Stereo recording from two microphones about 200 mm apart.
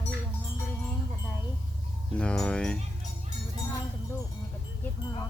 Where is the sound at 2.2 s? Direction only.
5° left (ahead or behind).